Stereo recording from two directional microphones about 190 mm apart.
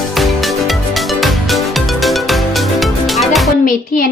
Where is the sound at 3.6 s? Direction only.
45° left (ahead or behind).